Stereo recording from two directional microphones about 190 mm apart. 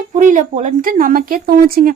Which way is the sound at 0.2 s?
40° right (ahead or behind).